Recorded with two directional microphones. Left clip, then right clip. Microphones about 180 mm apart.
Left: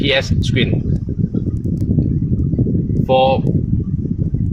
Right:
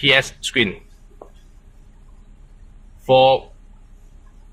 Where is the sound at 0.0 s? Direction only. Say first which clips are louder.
Right 1 dB; centre (ahead or behind).